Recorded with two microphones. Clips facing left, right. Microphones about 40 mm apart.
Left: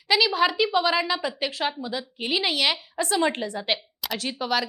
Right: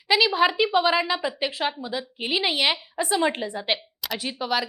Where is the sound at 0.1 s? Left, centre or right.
Centre.